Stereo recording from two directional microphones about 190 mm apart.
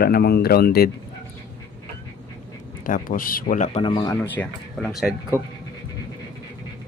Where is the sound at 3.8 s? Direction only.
25° left (ahead or behind).